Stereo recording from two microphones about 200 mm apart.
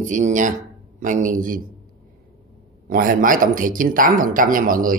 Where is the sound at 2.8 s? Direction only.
45° right (ahead or behind).